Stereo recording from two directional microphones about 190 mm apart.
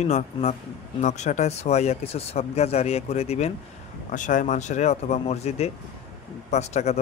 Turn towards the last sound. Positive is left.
turn(degrees=35)  # may be behind; listen again after turning